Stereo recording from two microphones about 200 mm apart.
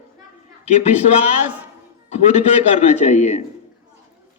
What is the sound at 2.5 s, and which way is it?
Speech, 35° left (ahead or behind).